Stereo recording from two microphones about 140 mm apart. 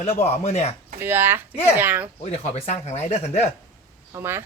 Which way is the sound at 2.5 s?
50° left (ahead or behind).